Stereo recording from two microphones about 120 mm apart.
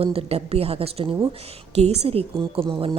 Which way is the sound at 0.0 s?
50° right (ahead or behind).